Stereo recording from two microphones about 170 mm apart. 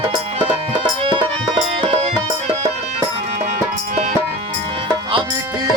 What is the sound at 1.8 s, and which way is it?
Music, 35° right (ahead or behind).